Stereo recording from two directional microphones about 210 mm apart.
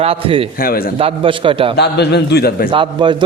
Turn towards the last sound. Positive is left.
turn(degrees=-20)  # may be behind; listen again after turning